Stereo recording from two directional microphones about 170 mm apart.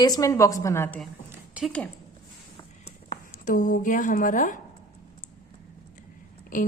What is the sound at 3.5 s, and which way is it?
A woman's voice, 50° left (ahead or behind).